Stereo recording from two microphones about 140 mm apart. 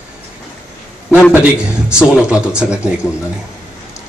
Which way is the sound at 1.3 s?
10° right (ahead or behind).